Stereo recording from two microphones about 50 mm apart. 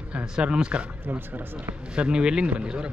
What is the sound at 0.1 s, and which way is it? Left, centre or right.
Speech, centre.